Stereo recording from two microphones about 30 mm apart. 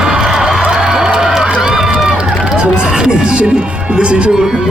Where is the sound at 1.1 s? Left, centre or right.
Right.